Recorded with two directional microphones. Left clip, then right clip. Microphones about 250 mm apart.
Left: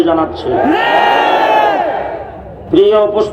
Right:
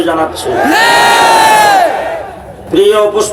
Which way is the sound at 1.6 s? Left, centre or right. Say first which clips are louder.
Right 5 dB; centre.